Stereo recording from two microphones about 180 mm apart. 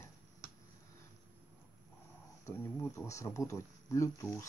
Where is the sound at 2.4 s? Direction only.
15° left (ahead or behind).